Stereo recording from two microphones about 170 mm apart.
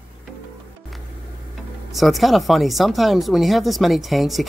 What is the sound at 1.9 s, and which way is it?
Speech, centre (ahead or behind).